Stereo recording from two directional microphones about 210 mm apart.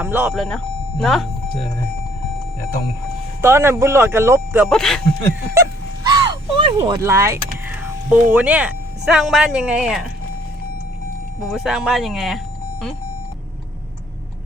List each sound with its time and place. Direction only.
0.0 s speech: 10° right (ahead or behind)
3.4 s speech: 10° right (ahead or behind)
4.7 s speech: centre (ahead or behind)
5.5 s a sound: 20° right (ahead or behind)
6.7 s speech: 15° right (ahead or behind)
11.5 s speech: centre (ahead or behind)